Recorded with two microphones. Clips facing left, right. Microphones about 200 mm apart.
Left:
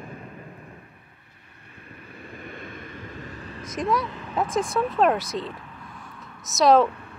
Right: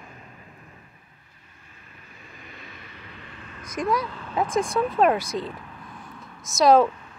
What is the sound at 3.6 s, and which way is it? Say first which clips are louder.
Speech: even; centre (ahead or behind).